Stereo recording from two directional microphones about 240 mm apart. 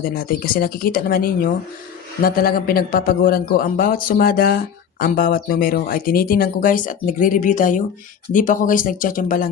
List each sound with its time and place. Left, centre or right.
0.0 s speech: left